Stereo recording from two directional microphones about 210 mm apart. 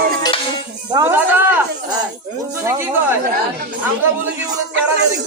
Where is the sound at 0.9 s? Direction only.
15° right (ahead or behind).